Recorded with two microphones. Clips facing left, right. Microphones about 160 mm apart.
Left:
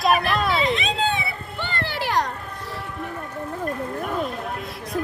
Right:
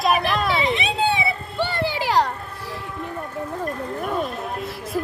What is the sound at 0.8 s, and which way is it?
Speech, 10° right (ahead or behind).